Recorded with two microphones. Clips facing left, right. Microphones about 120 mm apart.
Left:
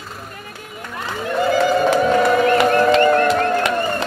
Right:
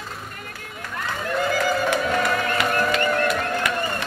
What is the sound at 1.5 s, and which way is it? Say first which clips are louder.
Music: left 9 dB; 25° left (ahead or behind).